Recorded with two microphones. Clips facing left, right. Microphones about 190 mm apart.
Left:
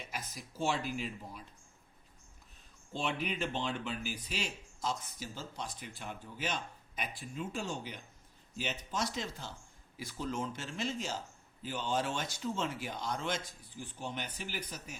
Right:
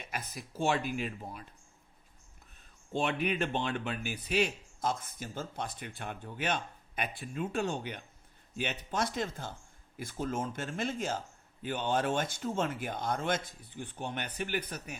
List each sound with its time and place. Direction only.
0.0 s speech: 60° right (ahead or behind)
2.9 s a man's voice: 60° right (ahead or behind)